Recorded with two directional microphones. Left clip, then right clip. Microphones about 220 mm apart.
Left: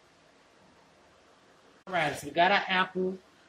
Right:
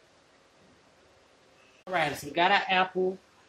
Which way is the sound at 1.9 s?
15° right (ahead or behind).